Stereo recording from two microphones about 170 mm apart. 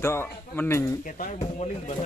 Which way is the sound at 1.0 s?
50° left (ahead or behind).